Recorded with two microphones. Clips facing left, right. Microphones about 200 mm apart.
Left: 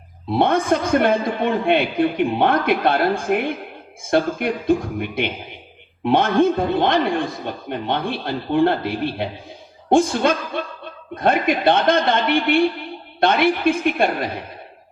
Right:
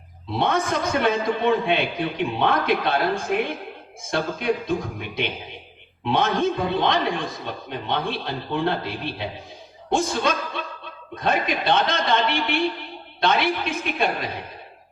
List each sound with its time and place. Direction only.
0.3 s a man's voice: 55° left (ahead or behind)